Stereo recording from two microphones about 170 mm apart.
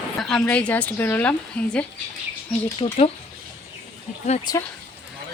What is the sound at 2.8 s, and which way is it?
Speech, 30° left (ahead or behind).